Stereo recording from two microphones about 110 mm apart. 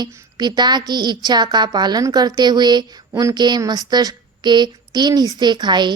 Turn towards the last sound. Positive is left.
turn(degrees=-40)  # may be behind; listen again after turning